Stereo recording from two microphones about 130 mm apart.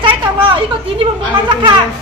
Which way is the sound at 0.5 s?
40° right (ahead or behind).